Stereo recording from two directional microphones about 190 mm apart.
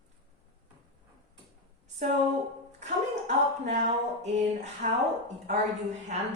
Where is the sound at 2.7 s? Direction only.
40° right (ahead or behind).